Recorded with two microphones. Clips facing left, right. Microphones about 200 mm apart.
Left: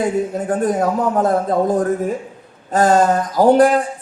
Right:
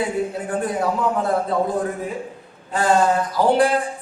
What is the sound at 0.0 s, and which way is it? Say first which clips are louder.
Speech: left 4 dB; 45° left (ahead or behind).